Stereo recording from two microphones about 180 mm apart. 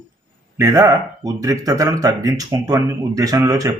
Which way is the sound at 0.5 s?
15° right (ahead or behind).